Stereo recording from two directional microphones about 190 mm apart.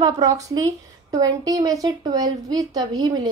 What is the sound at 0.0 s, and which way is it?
A woman's voice, 20° right (ahead or behind).